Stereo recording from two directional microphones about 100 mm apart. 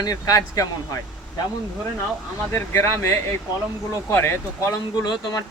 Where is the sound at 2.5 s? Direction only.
25° left (ahead or behind).